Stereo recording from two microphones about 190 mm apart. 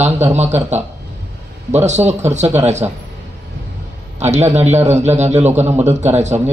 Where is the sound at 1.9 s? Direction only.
35° right (ahead or behind).